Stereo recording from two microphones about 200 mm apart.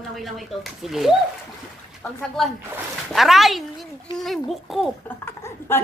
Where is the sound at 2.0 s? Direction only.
10° left (ahead or behind).